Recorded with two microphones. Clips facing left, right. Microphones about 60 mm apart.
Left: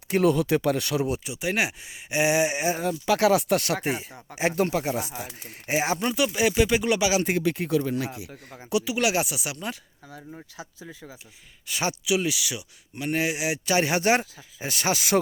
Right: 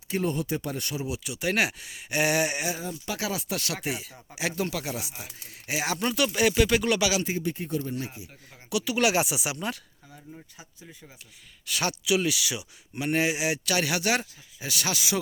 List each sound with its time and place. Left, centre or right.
0.2 s speech: left
1.4 s speech: centre
3.2 s speech: left
3.8 s speech: left
5.4 s speech: left
7.3 s speech: left
8.8 s speech: centre
10.1 s speech: left
11.6 s speech: centre
12.0 s speech: centre
13.7 s speech: left